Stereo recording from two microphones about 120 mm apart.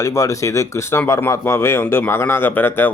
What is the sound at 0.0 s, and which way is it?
Speech, 25° left (ahead or behind).